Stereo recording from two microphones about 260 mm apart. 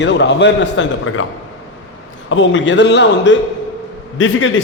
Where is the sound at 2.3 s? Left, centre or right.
Left.